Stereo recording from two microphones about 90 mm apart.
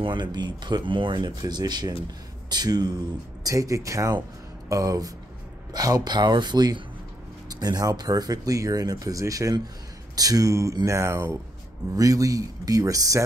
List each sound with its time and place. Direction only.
0.0 s speech: 60° right (ahead or behind); by 13.2 s 40° right (ahead or behind)